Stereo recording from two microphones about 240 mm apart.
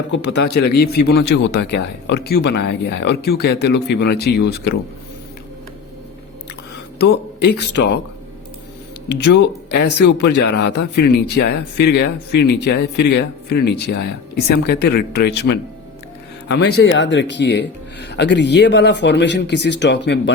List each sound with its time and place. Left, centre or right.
0.1 s a man's voice: left
7.0 s speech: left
9.0 s a man's voice: left